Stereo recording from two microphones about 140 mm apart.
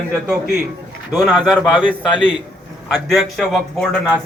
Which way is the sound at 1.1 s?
Centre (ahead or behind).